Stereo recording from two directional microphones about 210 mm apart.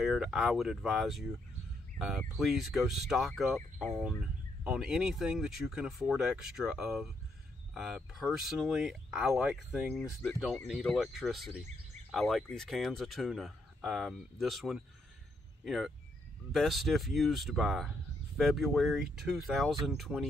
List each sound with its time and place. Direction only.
0.0 s speech: centre (ahead or behind)